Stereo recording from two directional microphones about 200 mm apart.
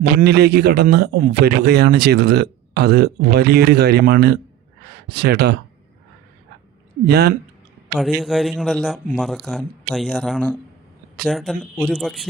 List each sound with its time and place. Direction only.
0.2 s speech: 55° right (ahead or behind)
7.1 s speech: 50° right (ahead or behind)
7.9 s a man's voice: centre (ahead or behind)